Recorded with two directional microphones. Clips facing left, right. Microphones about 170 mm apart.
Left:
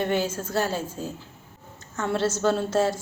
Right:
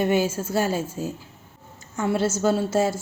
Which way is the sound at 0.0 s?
10° right (ahead or behind).